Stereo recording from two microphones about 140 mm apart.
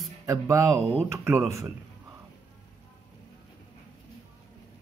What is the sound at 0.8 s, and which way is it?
Speech, 45° right (ahead or behind).